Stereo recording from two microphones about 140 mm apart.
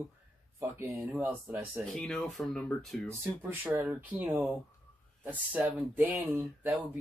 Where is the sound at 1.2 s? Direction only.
15° right (ahead or behind).